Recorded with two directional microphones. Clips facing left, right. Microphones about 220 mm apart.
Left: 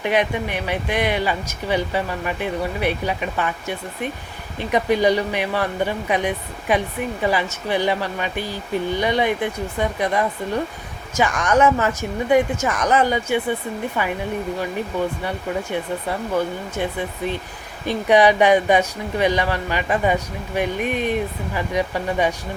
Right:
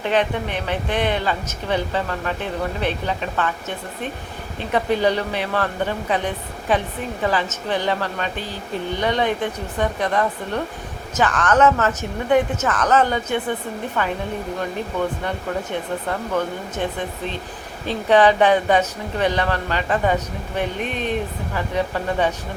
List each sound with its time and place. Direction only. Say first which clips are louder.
0.0 s a woman's voice: even; 10° left (ahead or behind)
15.7 s a woman's voice: left 1 dB; 10° left (ahead or behind)